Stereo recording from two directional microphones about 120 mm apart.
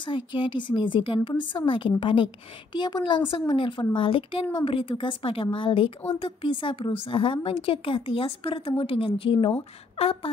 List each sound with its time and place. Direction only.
0.0 s a woman's voice: 40° left (ahead or behind)